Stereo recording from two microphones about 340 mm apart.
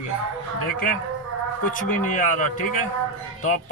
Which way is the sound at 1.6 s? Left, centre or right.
Left.